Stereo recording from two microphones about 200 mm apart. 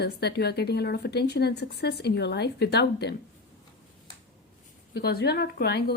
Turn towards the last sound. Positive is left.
turn(degrees=55)  # may be behind; listen again after turning